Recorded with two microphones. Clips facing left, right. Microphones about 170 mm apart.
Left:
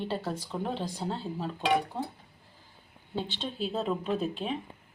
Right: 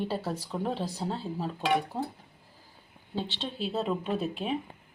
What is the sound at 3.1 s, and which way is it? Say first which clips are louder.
Speech: even; 50° left (ahead or behind).